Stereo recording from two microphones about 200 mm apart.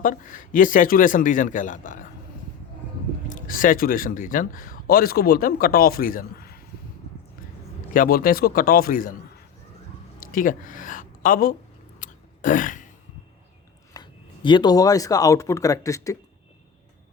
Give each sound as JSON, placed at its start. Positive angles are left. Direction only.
{"t": 0.0, "sound": "a man's voice", "side_deg": 40}
{"t": 3.2, "sound": "speech", "side_deg": 40}
{"t": 7.9, "sound": "speech", "side_deg": 45}
{"t": 10.3, "sound": "speech", "side_deg": 40}
{"t": 11.9, "sound": "a sound", "side_deg": 40}
{"t": 13.9, "sound": "speech", "side_deg": 20}